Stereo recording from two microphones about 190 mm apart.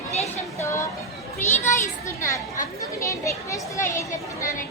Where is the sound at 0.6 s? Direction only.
15° left (ahead or behind).